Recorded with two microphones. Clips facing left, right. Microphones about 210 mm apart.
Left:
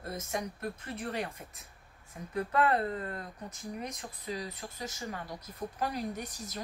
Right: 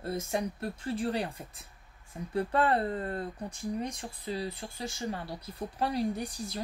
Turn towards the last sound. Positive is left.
turn(degrees=-30)  # may be behind; listen again after turning